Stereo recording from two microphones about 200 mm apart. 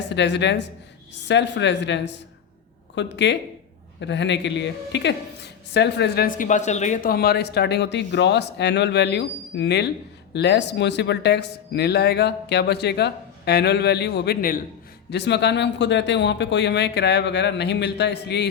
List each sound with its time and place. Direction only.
0.1 s speech: 60° left (ahead or behind)